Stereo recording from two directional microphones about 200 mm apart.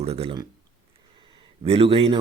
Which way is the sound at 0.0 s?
30° right (ahead or behind).